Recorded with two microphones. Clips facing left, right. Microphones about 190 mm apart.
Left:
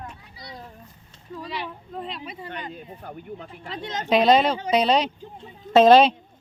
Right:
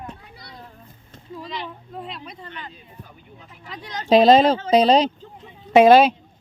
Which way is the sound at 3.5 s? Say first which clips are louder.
Even; 30° left (ahead or behind).